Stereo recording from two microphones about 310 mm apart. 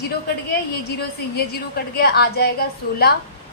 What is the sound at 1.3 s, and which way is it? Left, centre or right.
A woman's voice, left.